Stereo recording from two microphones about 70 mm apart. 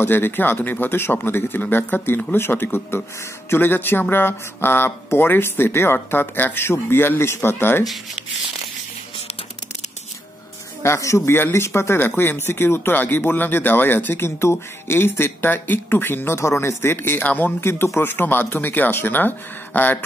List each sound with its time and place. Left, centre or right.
0.0 s speech: left
10.8 s speech: left
11.3 s speech: left
16.3 s speech: left
17.6 s speech: left